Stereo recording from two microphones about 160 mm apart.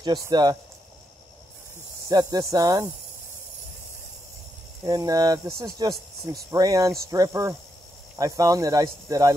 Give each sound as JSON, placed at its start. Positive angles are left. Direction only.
{"t": 0.0, "sound": "speech", "side_deg": -25}
{"t": 2.0, "sound": "speech", "side_deg": -25}
{"t": 4.8, "sound": "speech", "side_deg": -25}